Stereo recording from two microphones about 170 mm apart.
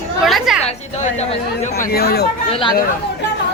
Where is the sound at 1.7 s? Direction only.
65° left (ahead or behind).